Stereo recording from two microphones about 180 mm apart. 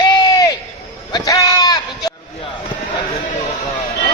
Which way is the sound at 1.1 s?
20° left (ahead or behind).